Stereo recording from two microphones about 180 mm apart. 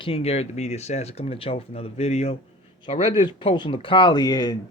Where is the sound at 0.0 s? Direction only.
35° left (ahead or behind).